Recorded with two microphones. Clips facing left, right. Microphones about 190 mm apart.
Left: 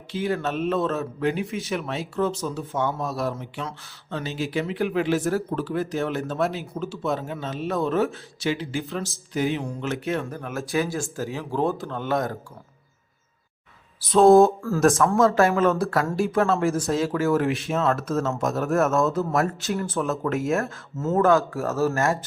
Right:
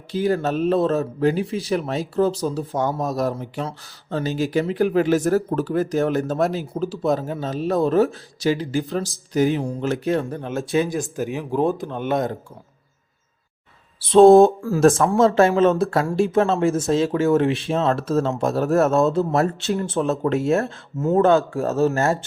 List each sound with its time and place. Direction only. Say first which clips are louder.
0.1 s speech: right 5 dB; 40° right (ahead or behind); by 12.4 s 20° right (ahead or behind)
14.1 s speech: right 4 dB; 30° right (ahead or behind)
15.3 s speech: right 4 dB; 20° right (ahead or behind)